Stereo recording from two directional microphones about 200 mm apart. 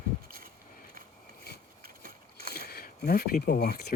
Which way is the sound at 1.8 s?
50° right (ahead or behind).